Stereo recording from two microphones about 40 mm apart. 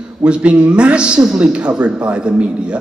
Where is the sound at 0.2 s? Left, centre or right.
Right.